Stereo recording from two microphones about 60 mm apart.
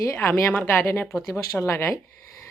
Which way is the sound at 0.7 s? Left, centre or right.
Left.